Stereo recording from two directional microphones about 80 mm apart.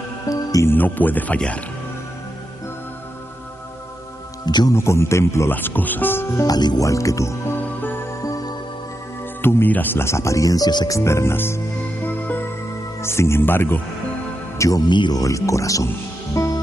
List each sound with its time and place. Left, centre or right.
0.3 s music: left
0.7 s speech: left
4.5 s speech: left
4.7 s speech: left
5.5 s speech: left
6.4 s speech: left
6.8 s speech: left
9.4 s speech: left
10.0 s speech: left
10.9 s music: left
13.0 s speech: left
14.9 s speech: left
15.1 s speech: left
16.3 s music: left